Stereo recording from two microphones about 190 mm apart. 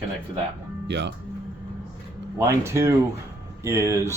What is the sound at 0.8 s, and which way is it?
Speech, 65° right (ahead or behind).